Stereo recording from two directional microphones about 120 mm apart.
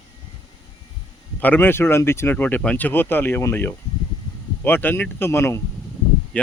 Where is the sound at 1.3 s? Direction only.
15° left (ahead or behind).